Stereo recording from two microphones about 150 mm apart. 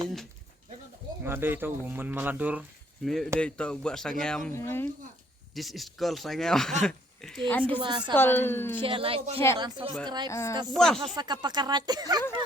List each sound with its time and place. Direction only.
1.2 s speech: 15° right (ahead or behind); by 4.5 s 5° left (ahead or behind)
4.5 s speech: 15° left (ahead or behind)
5.5 s a woman's voice: centre (ahead or behind)
7.8 s speech: 30° right (ahead or behind)
8.1 s speech: 15° left (ahead or behind)
8.8 s speech: 35° right (ahead or behind)
10.2 s a woman's voice: 20° left (ahead or behind)
10.8 s speech: 5° left (ahead or behind)
11.1 s speech: 30° right (ahead or behind)